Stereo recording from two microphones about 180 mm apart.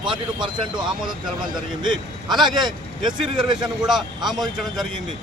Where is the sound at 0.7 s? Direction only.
5° right (ahead or behind).